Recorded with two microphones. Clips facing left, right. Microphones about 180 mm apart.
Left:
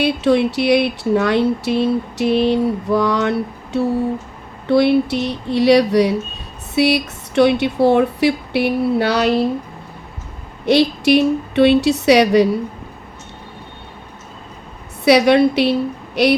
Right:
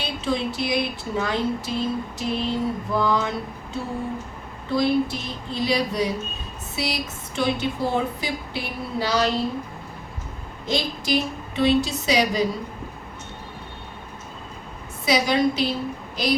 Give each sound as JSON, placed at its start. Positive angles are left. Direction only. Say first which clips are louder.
{"t": 0.0, "sound": "speech", "louder": "left 11 dB", "side_deg": 65}
{"t": 10.7, "sound": "speech", "louder": "left 11 dB", "side_deg": 70}
{"t": 15.0, "sound": "speech", "louder": "left 9 dB", "side_deg": 65}